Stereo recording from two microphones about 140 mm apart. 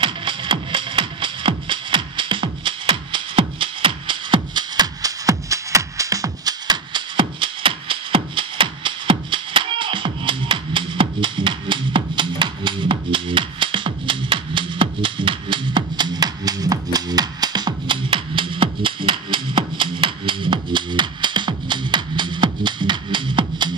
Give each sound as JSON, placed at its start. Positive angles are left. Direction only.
{"t": 0.0, "sound": "music", "side_deg": -35}